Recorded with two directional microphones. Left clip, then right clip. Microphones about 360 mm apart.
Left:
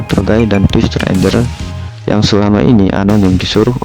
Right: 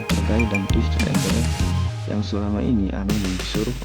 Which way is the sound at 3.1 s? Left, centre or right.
Centre.